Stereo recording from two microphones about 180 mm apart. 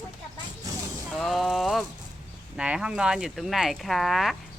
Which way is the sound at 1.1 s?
Centre (ahead or behind).